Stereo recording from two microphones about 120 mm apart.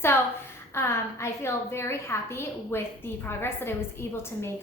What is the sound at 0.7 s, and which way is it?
A woman's voice, 20° left (ahead or behind).